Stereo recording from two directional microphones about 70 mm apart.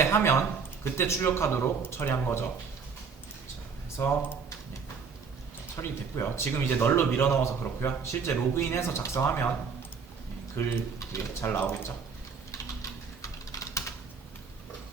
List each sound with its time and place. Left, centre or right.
0.0 s a man's voice: left
4.0 s speech: left
5.8 s a man's voice: left
10.5 s a man's voice: left
12.5 s typing: left